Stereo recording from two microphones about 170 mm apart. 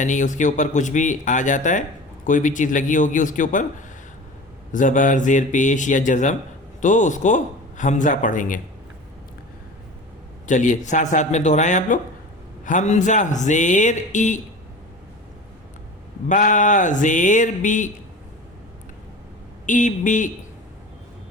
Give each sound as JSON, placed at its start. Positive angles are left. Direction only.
{"t": 0.0, "sound": "speech", "side_deg": 45}
{"t": 10.4, "sound": "speech", "side_deg": 45}
{"t": 16.3, "sound": "speech", "side_deg": 45}
{"t": 19.6, "sound": "speech", "side_deg": 50}